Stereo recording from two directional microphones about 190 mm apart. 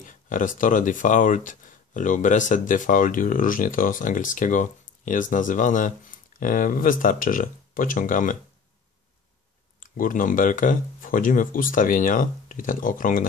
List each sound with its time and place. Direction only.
0.0 s speech: 45° left (ahead or behind)
9.8 s speech: 45° left (ahead or behind)